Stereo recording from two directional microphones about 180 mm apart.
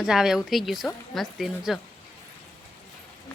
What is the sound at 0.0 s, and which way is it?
Speech, 5° right (ahead or behind).